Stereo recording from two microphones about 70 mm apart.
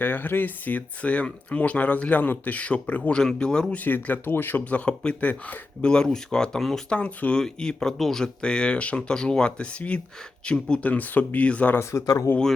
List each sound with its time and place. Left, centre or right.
0.0 s speech: left
3.8 s speech: left; by 7.0 s centre
7.0 s speech: centre
11.8 s speech: left